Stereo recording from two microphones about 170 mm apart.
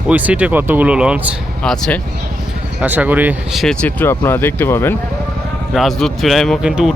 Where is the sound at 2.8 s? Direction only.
10° right (ahead or behind); by 4.9 s 15° left (ahead or behind).